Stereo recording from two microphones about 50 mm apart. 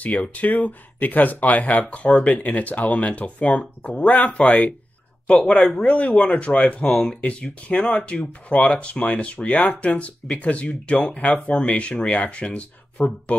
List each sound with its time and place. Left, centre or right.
0.0 s speech: left